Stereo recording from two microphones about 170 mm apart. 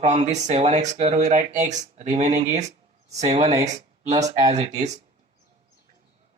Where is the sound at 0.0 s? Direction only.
40° right (ahead or behind).